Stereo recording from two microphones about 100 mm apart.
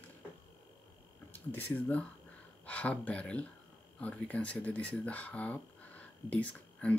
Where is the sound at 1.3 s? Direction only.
20° left (ahead or behind).